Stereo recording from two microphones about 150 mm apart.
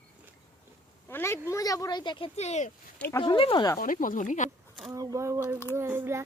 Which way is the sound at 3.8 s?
65° left (ahead or behind).